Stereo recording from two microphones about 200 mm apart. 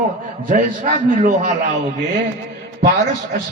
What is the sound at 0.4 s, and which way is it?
A man's voice, 40° right (ahead or behind).